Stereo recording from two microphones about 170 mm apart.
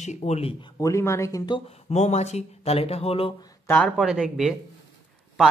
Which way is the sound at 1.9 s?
40° left (ahead or behind).